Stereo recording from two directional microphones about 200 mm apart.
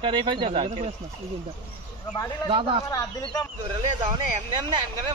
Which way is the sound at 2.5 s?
25° right (ahead or behind).